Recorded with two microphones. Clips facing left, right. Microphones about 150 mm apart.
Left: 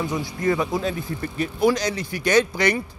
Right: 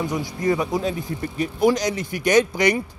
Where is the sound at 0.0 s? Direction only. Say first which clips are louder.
Even; 15° right (ahead or behind).